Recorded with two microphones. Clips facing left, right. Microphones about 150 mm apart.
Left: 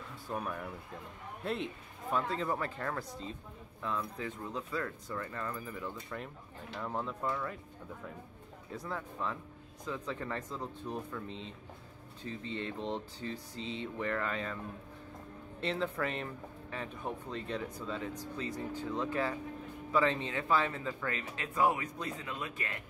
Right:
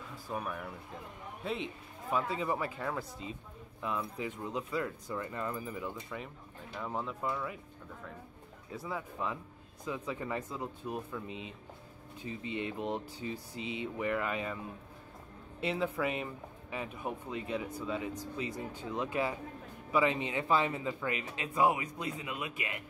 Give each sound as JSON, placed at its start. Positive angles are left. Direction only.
{"t": 0.1, "sound": "speech", "side_deg": 0}
{"t": 8.7, "sound": "speech", "side_deg": -5}
{"t": 15.6, "sound": "speech", "side_deg": -10}